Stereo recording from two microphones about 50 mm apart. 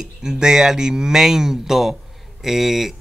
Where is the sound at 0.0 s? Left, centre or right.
Centre.